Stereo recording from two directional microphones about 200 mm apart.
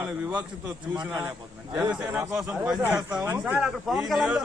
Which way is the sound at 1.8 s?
10° right (ahead or behind).